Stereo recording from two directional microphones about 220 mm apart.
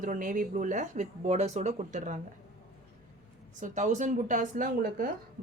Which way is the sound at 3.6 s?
35° right (ahead or behind).